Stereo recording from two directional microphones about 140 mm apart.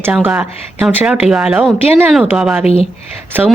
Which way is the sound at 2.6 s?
45° left (ahead or behind).